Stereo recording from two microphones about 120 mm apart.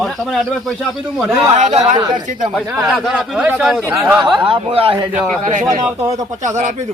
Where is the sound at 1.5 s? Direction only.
65° right (ahead or behind).